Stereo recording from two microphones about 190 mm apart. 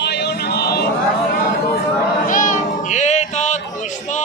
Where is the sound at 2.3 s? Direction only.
45° left (ahead or behind).